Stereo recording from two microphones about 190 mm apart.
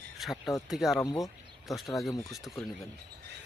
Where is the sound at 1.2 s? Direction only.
Centre (ahead or behind).